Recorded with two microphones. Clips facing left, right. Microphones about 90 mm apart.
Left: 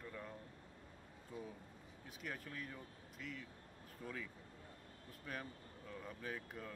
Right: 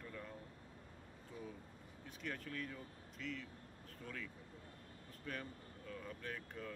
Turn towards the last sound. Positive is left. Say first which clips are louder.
# even
turn(degrees=10)  # may be behind; listen again after turning